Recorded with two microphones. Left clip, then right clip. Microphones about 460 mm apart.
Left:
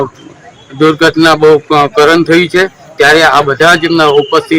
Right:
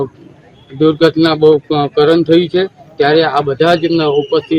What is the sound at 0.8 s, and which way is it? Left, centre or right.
A man's voice, right.